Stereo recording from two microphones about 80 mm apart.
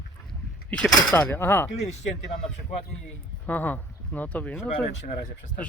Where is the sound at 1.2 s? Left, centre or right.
Left.